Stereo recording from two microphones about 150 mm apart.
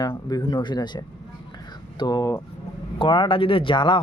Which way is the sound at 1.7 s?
30° left (ahead or behind).